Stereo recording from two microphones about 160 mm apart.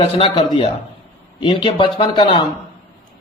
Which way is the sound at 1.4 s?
35° left (ahead or behind).